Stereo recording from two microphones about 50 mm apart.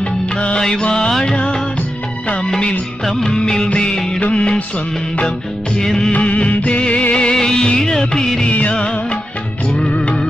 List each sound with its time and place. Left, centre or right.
0.6 s music of bollywood: centre
4.2 s music: left
5.8 s music of bollywood: centre
6.1 s music: left
8.4 s music: left
9.7 s music of bollywood: centre